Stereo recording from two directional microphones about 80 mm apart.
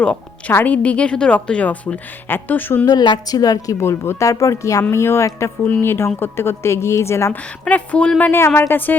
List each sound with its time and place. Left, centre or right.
0.0 s a woman's voice: centre
2.8 s speech: left
3.2 s a woman's voice: left
3.8 s a woman's voice: left
5.6 s a woman's voice: left
7.6 s speech: centre
8.2 s a woman's voice: left